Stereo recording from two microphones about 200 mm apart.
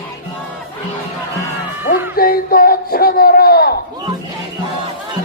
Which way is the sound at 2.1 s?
50° left (ahead or behind).